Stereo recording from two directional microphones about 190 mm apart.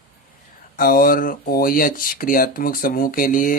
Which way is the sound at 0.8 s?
45° left (ahead or behind).